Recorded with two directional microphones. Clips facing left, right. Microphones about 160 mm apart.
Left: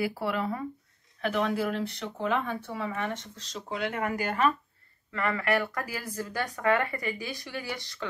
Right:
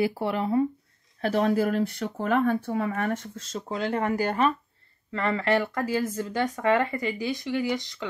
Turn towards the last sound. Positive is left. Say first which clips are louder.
# right 9 dB
turn(degrees=-20)  # may be behind; listen again after turning